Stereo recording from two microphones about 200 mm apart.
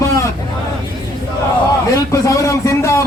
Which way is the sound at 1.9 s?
15° left (ahead or behind).